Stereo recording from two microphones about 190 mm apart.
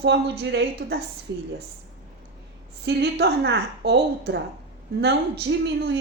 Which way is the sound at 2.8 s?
60° right (ahead or behind).